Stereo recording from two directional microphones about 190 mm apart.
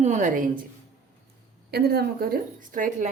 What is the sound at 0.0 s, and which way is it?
Speech, 40° right (ahead or behind).